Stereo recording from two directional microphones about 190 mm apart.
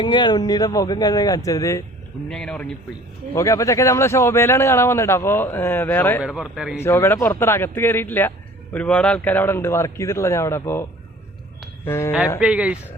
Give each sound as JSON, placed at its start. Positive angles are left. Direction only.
{"t": 0.0, "sound": "speech", "side_deg": 25}
{"t": 2.3, "sound": "speech", "side_deg": 5}
{"t": 3.3, "sound": "speech", "side_deg": 15}
{"t": 6.2, "sound": "speech", "side_deg": 0}
{"t": 6.7, "sound": "speech", "side_deg": 15}
{"t": 11.9, "sound": "speech", "side_deg": 15}
{"t": 12.4, "sound": "speech", "side_deg": -5}